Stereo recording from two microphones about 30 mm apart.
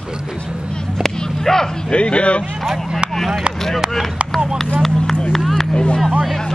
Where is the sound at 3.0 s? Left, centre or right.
Right.